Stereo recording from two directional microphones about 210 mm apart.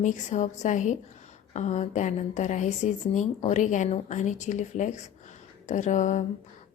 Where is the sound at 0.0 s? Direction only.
35° left (ahead or behind).